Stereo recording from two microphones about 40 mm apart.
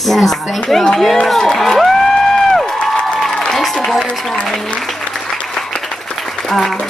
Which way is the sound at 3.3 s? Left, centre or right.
Centre.